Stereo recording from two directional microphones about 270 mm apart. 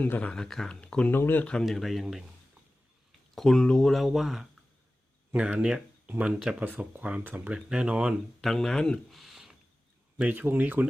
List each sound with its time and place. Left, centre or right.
0.0 s speech: centre
3.3 s speech: centre